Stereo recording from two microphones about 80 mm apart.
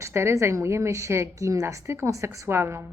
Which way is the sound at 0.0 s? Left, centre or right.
Right.